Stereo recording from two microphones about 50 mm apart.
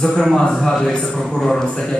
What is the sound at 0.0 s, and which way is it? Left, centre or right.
A man's voice, centre.